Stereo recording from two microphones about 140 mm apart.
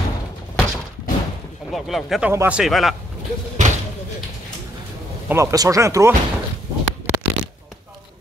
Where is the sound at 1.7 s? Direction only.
Centre (ahead or behind).